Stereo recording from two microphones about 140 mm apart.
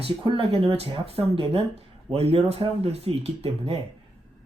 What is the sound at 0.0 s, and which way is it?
Speech, 40° right (ahead or behind).